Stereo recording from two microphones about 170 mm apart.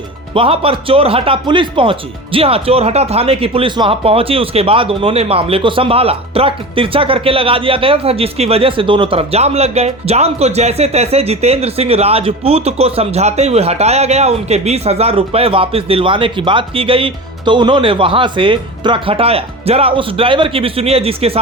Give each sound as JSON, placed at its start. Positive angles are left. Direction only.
{"t": 0.3, "sound": "speech", "side_deg": -35}